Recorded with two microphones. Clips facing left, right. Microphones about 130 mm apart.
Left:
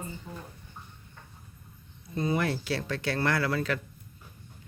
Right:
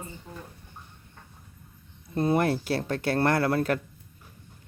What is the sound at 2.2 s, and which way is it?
Speech, 55° right (ahead or behind).